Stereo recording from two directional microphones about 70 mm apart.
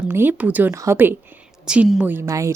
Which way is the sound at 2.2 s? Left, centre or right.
Right.